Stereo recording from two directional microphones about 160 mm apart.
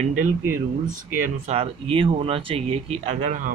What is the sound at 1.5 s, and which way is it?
Speech, 35° right (ahead or behind).